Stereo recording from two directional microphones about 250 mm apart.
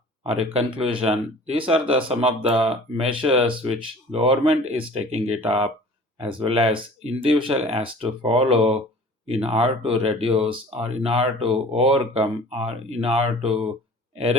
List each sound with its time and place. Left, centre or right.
0.3 s speech: right